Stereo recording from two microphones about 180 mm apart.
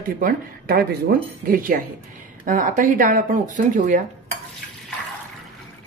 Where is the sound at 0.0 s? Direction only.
50° right (ahead or behind).